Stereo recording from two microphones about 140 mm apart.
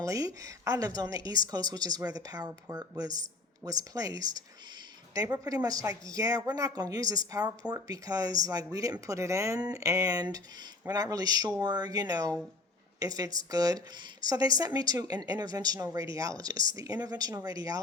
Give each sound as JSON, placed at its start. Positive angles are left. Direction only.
{"t": 0.0, "sound": "speech", "side_deg": -25}